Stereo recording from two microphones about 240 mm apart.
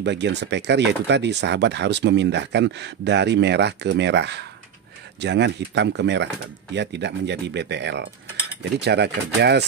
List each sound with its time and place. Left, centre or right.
0.0 s speech: right